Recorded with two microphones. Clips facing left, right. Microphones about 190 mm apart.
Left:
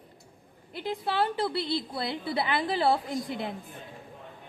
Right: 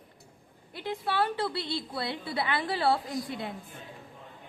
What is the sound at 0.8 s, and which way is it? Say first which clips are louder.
A woman's voice: left 1 dB; 25° left (ahead or behind).